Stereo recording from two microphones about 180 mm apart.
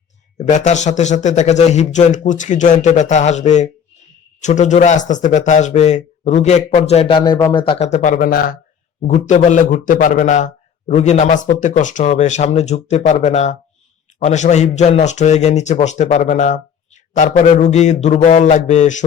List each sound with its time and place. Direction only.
0.5 s a man's voice: 40° left (ahead or behind); by 8.5 s 55° left (ahead or behind)
9.0 s a man's voice: 40° left (ahead or behind)